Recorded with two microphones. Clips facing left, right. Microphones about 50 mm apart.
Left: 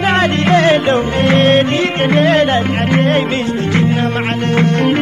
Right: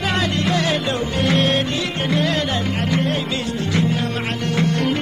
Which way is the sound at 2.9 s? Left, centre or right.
Left.